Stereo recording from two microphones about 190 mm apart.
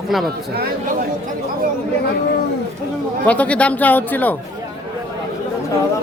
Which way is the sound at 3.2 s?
5° left (ahead or behind).